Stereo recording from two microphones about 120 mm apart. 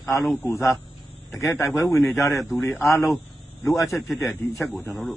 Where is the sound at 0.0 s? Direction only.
20° left (ahead or behind).